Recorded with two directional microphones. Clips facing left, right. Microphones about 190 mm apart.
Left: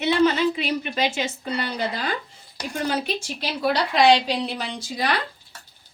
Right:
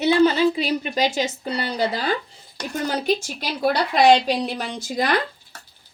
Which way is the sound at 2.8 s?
45° right (ahead or behind).